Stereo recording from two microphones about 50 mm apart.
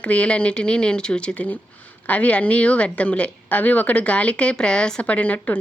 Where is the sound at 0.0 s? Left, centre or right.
Left.